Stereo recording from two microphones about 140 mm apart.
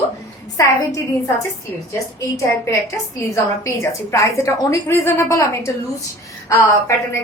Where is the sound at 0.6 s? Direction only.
25° left (ahead or behind).